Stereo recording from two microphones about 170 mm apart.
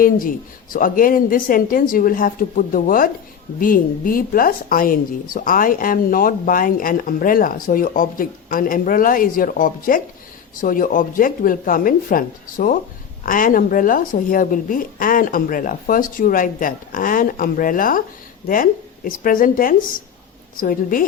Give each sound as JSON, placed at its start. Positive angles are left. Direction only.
{"t": 0.0, "sound": "a woman's voice", "side_deg": 55}